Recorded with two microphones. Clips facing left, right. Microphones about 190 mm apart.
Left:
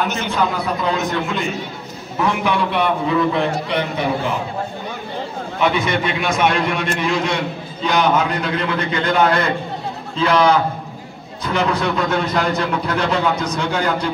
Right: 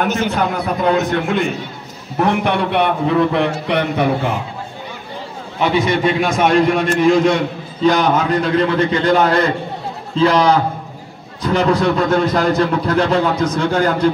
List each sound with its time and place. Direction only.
0.0 s a man's voice: 50° right (ahead or behind)
5.6 s a man's voice: 35° right (ahead or behind)